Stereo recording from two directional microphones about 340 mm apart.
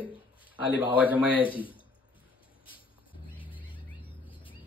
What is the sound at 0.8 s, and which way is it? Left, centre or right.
Speech, centre.